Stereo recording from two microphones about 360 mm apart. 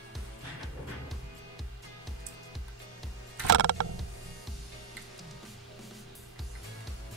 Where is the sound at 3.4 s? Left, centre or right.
Right.